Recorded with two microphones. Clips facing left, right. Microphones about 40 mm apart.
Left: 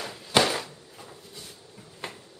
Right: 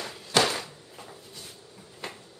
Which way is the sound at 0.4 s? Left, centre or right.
Centre.